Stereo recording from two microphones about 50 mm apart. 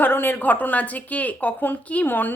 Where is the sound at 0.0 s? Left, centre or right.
Left.